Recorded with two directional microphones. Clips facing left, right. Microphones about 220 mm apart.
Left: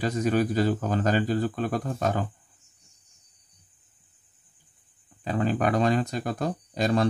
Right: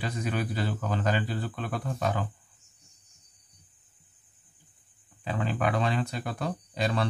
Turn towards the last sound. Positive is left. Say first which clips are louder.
# left 5 dB
turn(degrees=45)  # may be behind; listen again after turning